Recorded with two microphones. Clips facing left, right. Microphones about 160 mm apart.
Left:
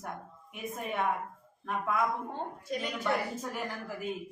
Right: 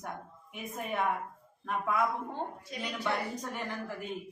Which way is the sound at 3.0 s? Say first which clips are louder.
Even; 5° left (ahead or behind).